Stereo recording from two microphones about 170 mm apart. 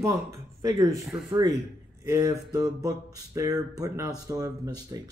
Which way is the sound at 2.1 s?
20° right (ahead or behind).